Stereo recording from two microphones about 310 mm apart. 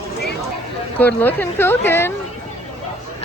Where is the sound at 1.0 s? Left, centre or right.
Centre.